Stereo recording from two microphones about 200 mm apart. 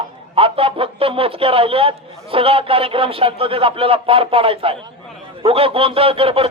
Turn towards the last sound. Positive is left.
turn(degrees=-30)  # may be behind; listen again after turning